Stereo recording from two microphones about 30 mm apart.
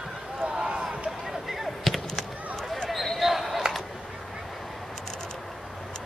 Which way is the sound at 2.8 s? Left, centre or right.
Centre.